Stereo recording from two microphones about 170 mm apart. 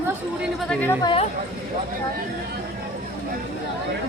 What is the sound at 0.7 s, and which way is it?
Speech, 10° left (ahead or behind).